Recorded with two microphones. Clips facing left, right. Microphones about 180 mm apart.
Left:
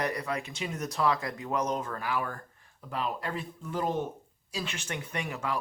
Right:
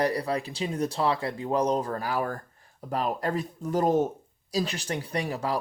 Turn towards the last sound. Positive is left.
turn(degrees=-35)  # may be behind; listen again after turning